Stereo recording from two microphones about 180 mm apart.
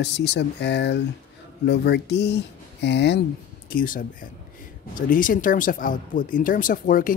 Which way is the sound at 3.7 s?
50° left (ahead or behind).